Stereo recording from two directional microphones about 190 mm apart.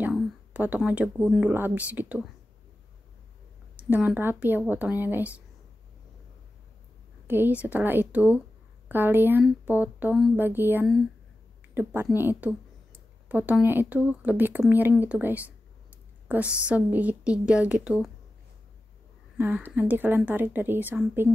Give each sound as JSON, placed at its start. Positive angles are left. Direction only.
{"t": 0.0, "sound": "speech", "side_deg": -10}
{"t": 3.7, "sound": "a woman's voice", "side_deg": -10}
{"t": 7.2, "sound": "a woman's voice", "side_deg": -10}
{"t": 12.2, "sound": "a sound", "side_deg": -10}
{"t": 13.7, "sound": "a woman's voice", "side_deg": -10}
{"t": 19.3, "sound": "a woman's voice", "side_deg": -10}